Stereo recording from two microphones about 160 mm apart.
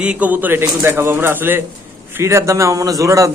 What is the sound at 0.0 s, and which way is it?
A man's voice, 10° right (ahead or behind).